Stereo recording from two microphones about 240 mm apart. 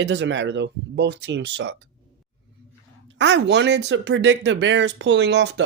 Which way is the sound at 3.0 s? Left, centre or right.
Right.